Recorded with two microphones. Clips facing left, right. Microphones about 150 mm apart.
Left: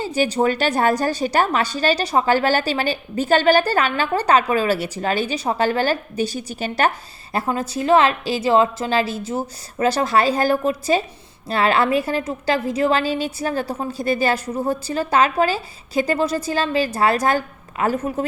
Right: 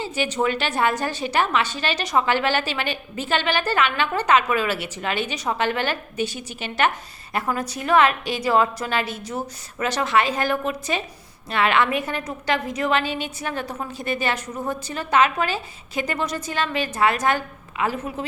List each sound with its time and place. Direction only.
0.0 s a woman's voice: 40° left (ahead or behind)
7.3 s a woman's voice: 25° left (ahead or behind); by 18.3 s 45° left (ahead or behind)